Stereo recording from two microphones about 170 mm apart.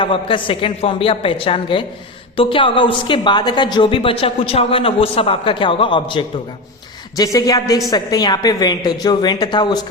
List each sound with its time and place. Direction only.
0.0 s a woman's voice: 30° left (ahead or behind)